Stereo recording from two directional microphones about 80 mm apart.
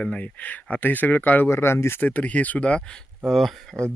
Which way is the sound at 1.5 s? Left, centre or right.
Left.